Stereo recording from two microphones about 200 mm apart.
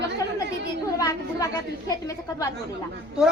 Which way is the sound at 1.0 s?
15° left (ahead or behind).